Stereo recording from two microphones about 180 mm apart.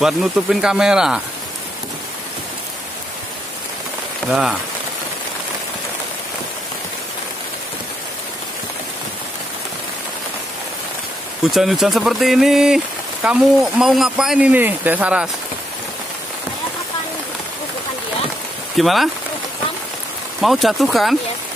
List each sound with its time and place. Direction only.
0.0 s speech: centre (ahead or behind)
4.3 s speech: 5° right (ahead or behind)
11.5 s speech: centre (ahead or behind)
18.8 s speech: centre (ahead or behind)
20.3 s speech: centre (ahead or behind)